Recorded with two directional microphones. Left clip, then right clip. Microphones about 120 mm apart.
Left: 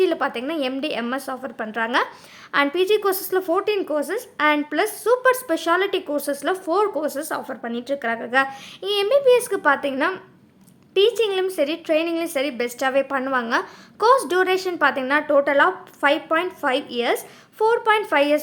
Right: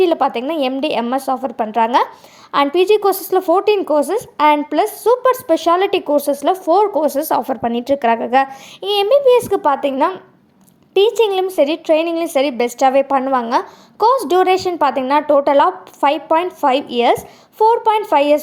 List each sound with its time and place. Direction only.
0.0 s a woman's voice: 35° right (ahead or behind)
8.9 s a woman's voice: 30° right (ahead or behind)